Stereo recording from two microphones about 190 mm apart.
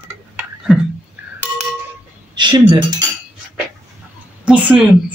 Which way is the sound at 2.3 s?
25° right (ahead or behind).